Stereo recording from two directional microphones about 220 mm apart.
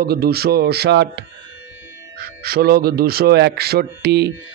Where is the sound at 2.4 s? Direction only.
45° right (ahead or behind).